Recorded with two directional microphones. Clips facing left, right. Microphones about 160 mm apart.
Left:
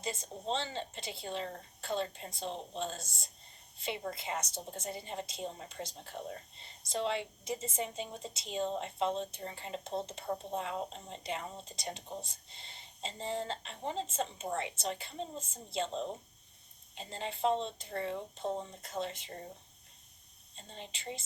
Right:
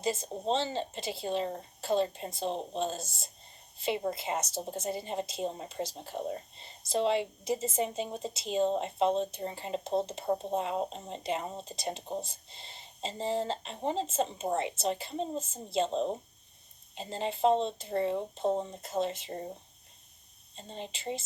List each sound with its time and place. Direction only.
0.0 s speech: 20° right (ahead or behind)
12.5 s whispering: 20° right (ahead or behind)
13.2 s speech: 20° right (ahead or behind)
20.6 s speech: 20° right (ahead or behind)